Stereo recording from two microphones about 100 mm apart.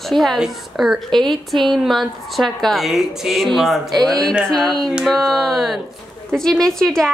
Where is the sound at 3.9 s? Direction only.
40° right (ahead or behind).